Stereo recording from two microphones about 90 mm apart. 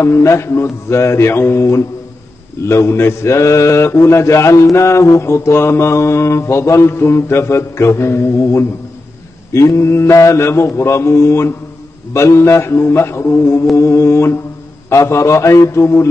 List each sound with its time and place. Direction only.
0.0 s mantra: 30° left (ahead or behind)